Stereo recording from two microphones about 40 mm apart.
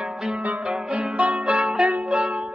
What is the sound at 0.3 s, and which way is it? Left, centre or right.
Music, right.